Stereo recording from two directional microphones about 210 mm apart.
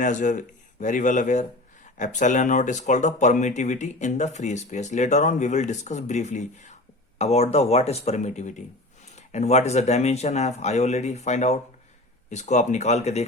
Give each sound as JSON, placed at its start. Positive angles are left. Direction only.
{"t": 0.0, "sound": "speech", "side_deg": 35}